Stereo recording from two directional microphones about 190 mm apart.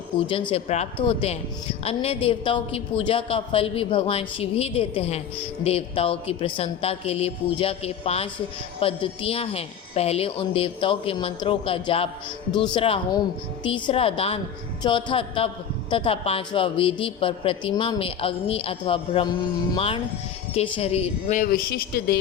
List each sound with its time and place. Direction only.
0.5 s a woman's voice: 35° left (ahead or behind); by 22.2 s 55° left (ahead or behind)